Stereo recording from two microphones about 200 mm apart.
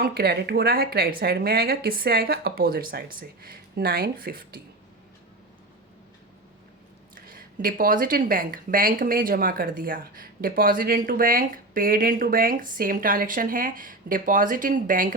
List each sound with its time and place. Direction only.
0.0 s speech: 50° right (ahead or behind)
7.3 s speech: 45° right (ahead or behind)